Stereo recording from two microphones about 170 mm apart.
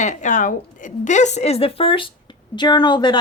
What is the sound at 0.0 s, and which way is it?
A woman's voice, 45° left (ahead or behind).